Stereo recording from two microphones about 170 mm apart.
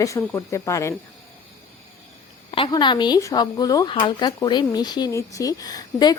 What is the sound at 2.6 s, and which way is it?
Speech, 25° left (ahead or behind).